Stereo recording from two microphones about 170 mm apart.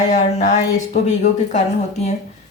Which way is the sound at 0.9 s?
45° left (ahead or behind).